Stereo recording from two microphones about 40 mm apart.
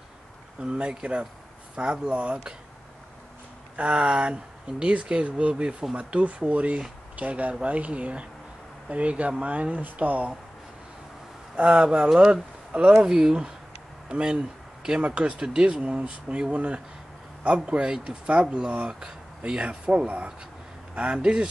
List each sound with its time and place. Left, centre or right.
0.6 s speech: right
3.7 s speech: right
11.5 s speech: right
13.0 s speech: centre
14.0 s a sound: right
15.0 s speech: right